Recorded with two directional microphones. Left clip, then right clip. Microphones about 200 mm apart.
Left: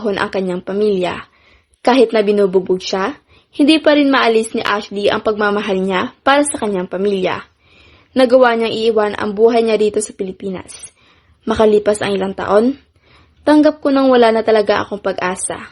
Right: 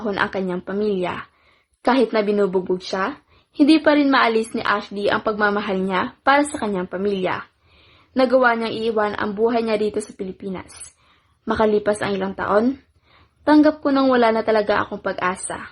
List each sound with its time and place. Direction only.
0.0 s speech: 25° left (ahead or behind)